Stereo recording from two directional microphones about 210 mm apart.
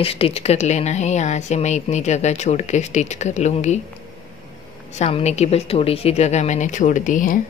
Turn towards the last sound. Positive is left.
turn(degrees=40)  # may be behind; listen again after turning